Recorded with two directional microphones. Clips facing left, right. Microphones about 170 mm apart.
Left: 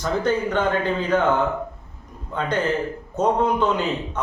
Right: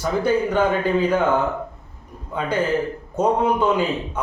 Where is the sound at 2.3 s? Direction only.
10° right (ahead or behind).